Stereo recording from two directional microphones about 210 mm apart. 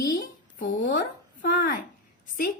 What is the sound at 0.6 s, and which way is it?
Speech, 40° left (ahead or behind).